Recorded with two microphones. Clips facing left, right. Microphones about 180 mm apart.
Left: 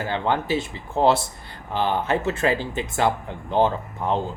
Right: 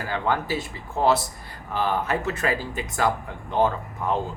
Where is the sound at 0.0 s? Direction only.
25° left (ahead or behind).